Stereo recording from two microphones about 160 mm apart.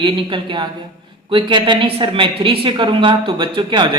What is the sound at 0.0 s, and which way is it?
A woman's voice, 30° right (ahead or behind).